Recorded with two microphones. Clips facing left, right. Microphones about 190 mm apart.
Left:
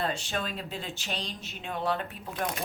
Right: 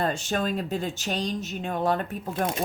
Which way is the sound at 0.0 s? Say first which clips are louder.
Right 5 dB; 45° right (ahead or behind).